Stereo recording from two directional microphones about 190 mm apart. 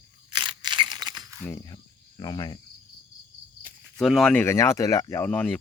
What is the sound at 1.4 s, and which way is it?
Cricket, 15° left (ahead or behind).